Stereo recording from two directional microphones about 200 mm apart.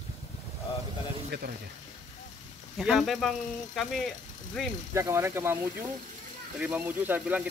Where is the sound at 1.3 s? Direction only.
55° right (ahead or behind).